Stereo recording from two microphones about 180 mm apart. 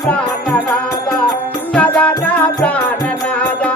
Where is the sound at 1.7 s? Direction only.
5° left (ahead or behind).